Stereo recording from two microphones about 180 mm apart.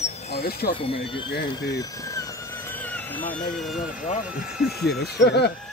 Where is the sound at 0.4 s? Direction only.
60° left (ahead or behind).